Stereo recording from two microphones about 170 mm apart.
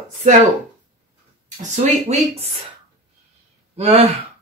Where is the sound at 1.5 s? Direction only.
40° right (ahead or behind).